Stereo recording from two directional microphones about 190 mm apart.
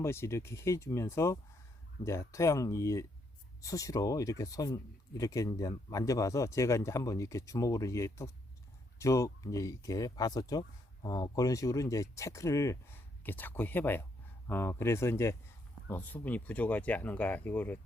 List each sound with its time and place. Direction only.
0.0 s speech: 15° left (ahead or behind)